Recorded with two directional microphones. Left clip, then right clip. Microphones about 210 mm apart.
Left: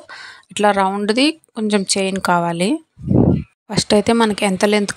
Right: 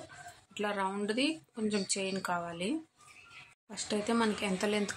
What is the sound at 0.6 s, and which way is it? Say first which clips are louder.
Speech: left 19 dB; 45° left (ahead or behind).